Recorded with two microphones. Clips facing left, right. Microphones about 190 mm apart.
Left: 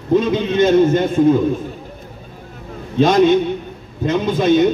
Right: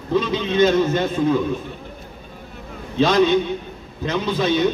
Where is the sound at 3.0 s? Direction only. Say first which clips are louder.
Left 4 dB; 50° left (ahead or behind).